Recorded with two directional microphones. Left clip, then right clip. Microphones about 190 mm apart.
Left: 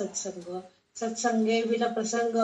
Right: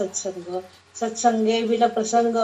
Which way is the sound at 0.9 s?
30° right (ahead or behind).